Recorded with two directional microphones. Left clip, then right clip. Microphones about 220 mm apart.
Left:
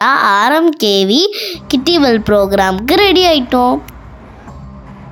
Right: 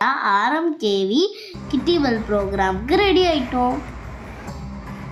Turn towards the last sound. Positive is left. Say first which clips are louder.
# left 8 dB
turn(degrees=45)  # may be behind; listen again after turning